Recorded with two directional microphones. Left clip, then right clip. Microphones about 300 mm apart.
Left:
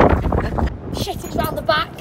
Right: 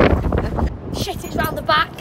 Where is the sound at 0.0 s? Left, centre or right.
Centre.